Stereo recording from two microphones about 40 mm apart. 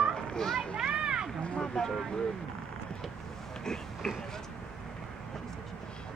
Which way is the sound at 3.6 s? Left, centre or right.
Centre.